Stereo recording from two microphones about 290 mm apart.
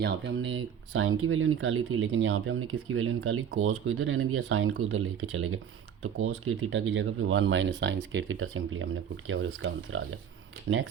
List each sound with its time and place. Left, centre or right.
0.0 s speech: right